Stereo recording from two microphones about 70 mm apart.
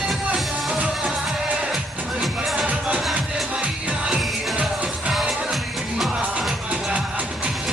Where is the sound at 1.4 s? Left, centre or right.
Centre.